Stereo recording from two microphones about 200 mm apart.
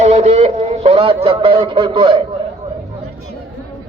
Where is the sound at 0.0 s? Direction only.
35° right (ahead or behind).